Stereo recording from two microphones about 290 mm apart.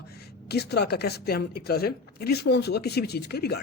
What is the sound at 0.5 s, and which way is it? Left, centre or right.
A man's voice, left.